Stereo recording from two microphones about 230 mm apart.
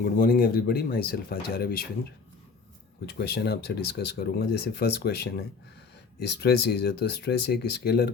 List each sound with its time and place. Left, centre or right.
0.0 s speech: left
3.1 s speech: left